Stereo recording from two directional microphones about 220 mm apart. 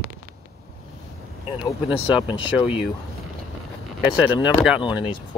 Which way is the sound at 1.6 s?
20° left (ahead or behind).